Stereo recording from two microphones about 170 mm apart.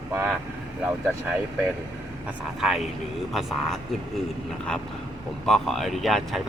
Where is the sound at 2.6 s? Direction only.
Centre (ahead or behind).